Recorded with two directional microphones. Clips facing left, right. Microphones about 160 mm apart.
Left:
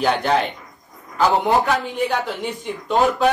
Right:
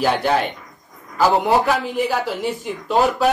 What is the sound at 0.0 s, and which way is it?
Speech, 5° right (ahead or behind).